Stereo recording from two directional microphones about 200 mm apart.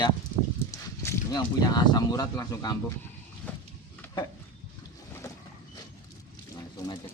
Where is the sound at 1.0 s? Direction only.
15° left (ahead or behind).